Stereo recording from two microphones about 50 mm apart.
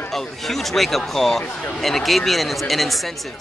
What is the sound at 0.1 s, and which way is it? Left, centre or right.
Speech, centre.